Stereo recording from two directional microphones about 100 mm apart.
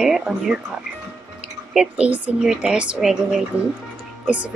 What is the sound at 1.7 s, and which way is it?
Speech, 10° right (ahead or behind).